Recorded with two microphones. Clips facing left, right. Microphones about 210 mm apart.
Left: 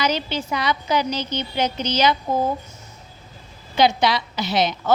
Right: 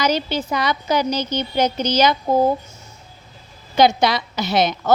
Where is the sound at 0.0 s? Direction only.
45° right (ahead or behind).